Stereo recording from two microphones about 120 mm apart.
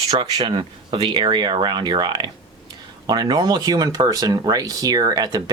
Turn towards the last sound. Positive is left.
turn(degrees=-35)  # may be behind; listen again after turning